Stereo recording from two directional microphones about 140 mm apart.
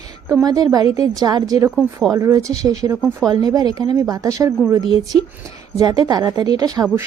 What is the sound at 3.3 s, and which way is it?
A woman's voice, 25° right (ahead or behind).